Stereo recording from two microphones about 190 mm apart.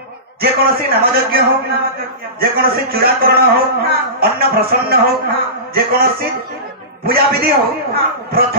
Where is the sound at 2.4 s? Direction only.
55° right (ahead or behind).